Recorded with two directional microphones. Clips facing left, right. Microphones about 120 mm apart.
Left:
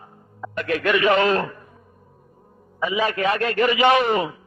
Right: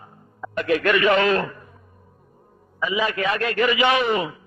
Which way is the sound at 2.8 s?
40° left (ahead or behind).